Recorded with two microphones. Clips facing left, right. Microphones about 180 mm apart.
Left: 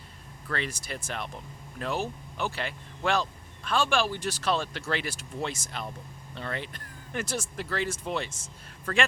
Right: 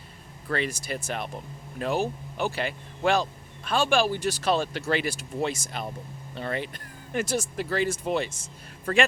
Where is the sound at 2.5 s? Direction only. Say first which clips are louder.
Right 5 dB; 10° right (ahead or behind).